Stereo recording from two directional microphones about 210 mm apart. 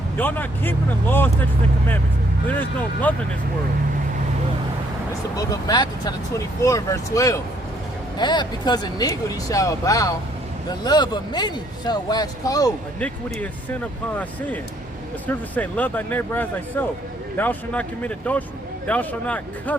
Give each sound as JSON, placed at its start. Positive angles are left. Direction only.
{"t": 0.2, "sound": "speech", "side_deg": 10}
{"t": 2.5, "sound": "speech", "side_deg": 10}
{"t": 5.4, "sound": "speech", "side_deg": 20}
{"t": 15.3, "sound": "speech", "side_deg": 5}